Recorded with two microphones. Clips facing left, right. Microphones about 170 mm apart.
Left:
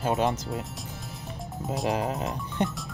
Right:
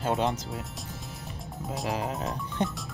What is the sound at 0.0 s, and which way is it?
Speech, 5° left (ahead or behind).